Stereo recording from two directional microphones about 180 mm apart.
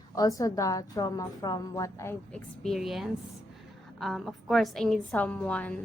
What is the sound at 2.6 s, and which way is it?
A woman's voice, centre (ahead or behind).